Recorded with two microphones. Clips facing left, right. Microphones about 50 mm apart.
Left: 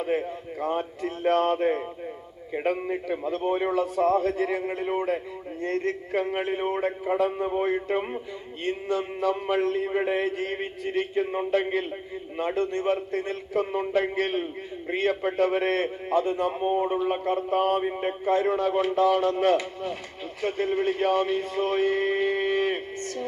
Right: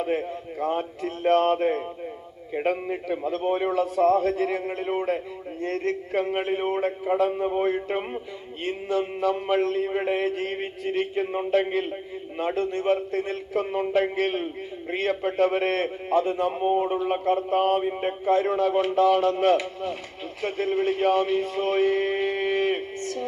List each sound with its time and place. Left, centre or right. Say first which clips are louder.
0.0 s a sound: right 1 dB; centre
1.0 s speech: right 2 dB; centre
12.4 s speech: even; centre
16.6 s speech: right 2 dB; right
17.0 s speech: right 2 dB; centre